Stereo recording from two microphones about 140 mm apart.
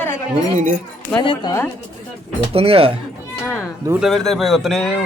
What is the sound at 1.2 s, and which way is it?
Speech, 35° left (ahead or behind).